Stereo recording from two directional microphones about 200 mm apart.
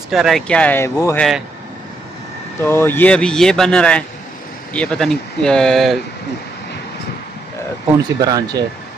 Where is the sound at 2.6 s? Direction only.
10° left (ahead or behind).